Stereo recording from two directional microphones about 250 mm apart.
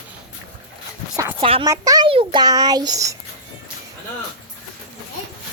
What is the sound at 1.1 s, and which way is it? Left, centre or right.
Speech, centre.